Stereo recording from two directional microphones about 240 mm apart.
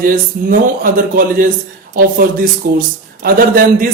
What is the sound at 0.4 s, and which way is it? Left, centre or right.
A man's voice, right.